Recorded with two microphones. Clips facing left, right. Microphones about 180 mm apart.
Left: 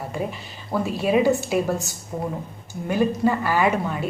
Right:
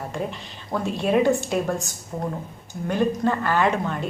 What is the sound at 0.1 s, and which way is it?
A woman's voice, 5° left (ahead or behind).